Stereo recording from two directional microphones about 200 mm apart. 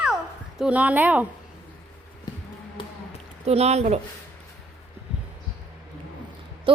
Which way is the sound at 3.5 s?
30° right (ahead or behind).